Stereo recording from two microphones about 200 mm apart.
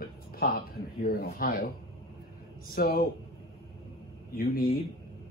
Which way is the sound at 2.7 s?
50° left (ahead or behind).